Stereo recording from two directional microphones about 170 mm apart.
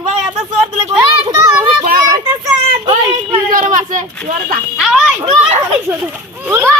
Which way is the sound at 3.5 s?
50° right (ahead or behind).